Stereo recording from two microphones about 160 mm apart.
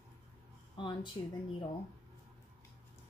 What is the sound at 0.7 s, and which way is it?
Speech, 30° left (ahead or behind).